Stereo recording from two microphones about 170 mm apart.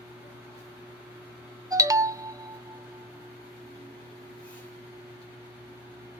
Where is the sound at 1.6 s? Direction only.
20° right (ahead or behind).